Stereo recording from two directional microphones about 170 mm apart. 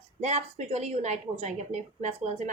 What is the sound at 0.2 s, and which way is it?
A woman's voice, 40° right (ahead or behind).